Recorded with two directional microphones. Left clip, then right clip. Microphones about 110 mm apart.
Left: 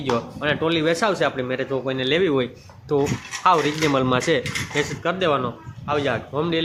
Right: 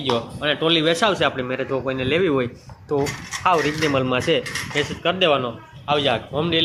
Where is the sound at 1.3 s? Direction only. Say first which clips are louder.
Even; 10° left (ahead or behind).